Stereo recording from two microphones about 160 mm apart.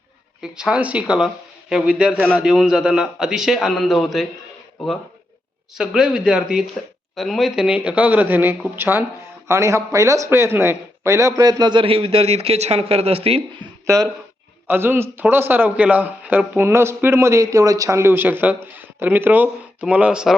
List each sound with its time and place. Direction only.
0.5 s a man's voice: 5° right (ahead or behind)
5.7 s a man's voice: 5° right (ahead or behind); by 13.4 s 40° right (ahead or behind)
13.8 s a man's voice: 20° right (ahead or behind)